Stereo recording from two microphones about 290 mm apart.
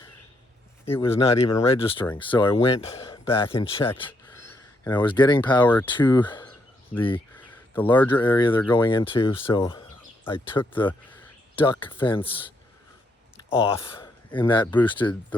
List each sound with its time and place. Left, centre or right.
1.0 s speech: centre
10.6 s speech: centre
11.5 s speech: centre
13.6 s speech: centre